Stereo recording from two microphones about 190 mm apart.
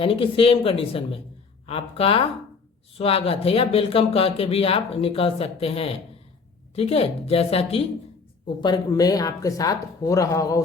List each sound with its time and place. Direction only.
0.0 s speech: 30° left (ahead or behind)